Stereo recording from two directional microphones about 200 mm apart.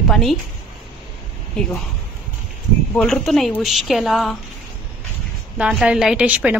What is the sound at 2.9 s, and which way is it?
A woman's voice, centre (ahead or behind).